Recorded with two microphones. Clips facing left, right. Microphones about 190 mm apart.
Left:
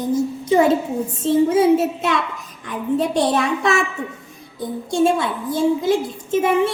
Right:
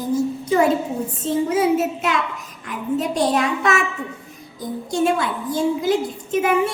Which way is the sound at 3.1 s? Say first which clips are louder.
Left 1 dB; 30° left (ahead or behind).